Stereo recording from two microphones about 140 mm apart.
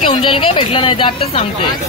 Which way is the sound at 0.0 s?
40° left (ahead or behind).